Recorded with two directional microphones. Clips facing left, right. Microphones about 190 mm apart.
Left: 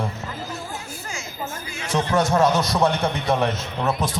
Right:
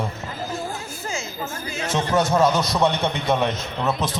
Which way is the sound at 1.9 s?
Centre (ahead or behind).